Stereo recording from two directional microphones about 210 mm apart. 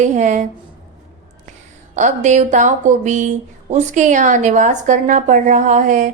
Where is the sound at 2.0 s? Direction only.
35° right (ahead or behind).